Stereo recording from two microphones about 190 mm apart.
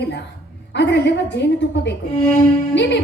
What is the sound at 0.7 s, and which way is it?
A woman's voice, 65° left (ahead or behind).